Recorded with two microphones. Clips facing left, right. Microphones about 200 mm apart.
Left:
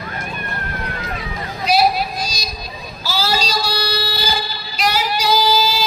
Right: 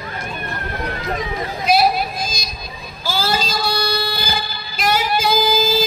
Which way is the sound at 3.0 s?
50° right (ahead or behind).